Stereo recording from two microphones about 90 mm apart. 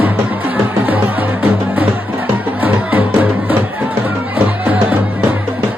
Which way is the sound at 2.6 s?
20° right (ahead or behind).